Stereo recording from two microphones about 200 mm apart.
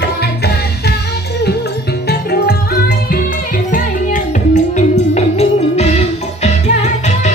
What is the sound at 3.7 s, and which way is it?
Music, 40° left (ahead or behind).